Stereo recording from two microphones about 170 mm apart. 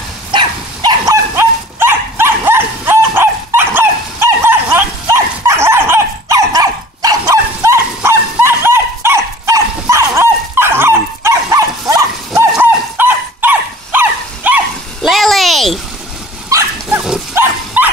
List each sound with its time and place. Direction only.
0.3 s dog: 25° right (ahead or behind); by 14.6 s 10° right (ahead or behind)
15.0 s a sound: centre (ahead or behind)
16.4 s dog: 20° right (ahead or behind)